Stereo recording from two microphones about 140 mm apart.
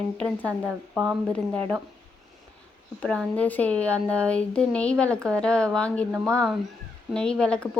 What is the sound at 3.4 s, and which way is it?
A woman's voice, 10° left (ahead or behind).